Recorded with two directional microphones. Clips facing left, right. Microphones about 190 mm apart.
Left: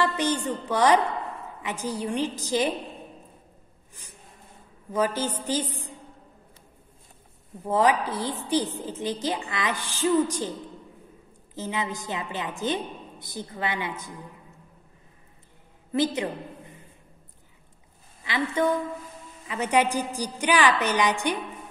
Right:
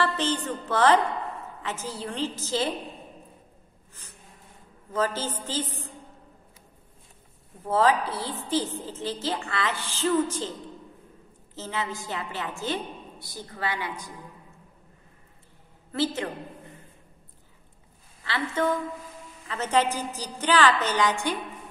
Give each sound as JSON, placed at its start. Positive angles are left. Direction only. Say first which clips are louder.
{"t": 0.0, "sound": "a woman's voice", "louder": "left 2 dB", "side_deg": 15}
{"t": 4.9, "sound": "a woman's voice", "louder": "left 2 dB", "side_deg": 15}
{"t": 7.6, "sound": "a woman's voice", "louder": "even", "side_deg": 15}
{"t": 11.5, "sound": "a woman's voice", "louder": "left 2 dB", "side_deg": 15}
{"t": 15.9, "sound": "a woman's voice", "louder": "left 3 dB", "side_deg": 15}
{"t": 18.2, "sound": "a woman's voice", "louder": "left 2 dB", "side_deg": 15}